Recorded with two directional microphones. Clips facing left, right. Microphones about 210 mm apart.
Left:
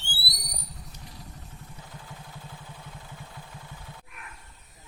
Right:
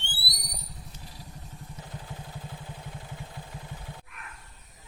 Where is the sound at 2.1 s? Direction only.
20° right (ahead or behind).